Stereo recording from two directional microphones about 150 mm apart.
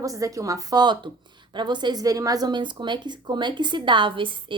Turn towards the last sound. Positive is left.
turn(degrees=-35)  # may be behind; listen again after turning